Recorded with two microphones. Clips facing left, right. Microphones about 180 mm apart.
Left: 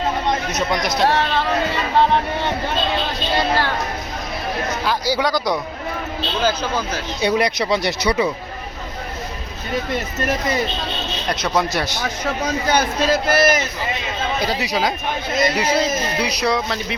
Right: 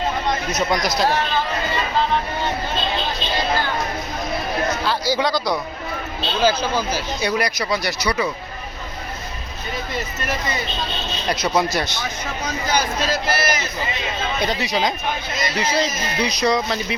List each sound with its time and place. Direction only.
0.5 s speech: centre (ahead or behind)
1.0 s speech: 70° left (ahead or behind)
3.3 s speech: 70° left (ahead or behind)
4.9 s speech: 10° left (ahead or behind)
6.4 s speech: 5° right (ahead or behind)
7.2 s speech: 25° left (ahead or behind)
11.5 s speech: centre (ahead or behind)
12.7 s a man's voice: 55° left (ahead or behind)
14.4 s speech: 5° left (ahead or behind)